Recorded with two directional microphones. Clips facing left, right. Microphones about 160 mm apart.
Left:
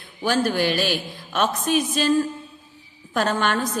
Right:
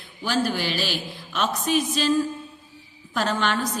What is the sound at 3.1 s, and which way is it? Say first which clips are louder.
Speech: left 2 dB; 50° left (ahead or behind).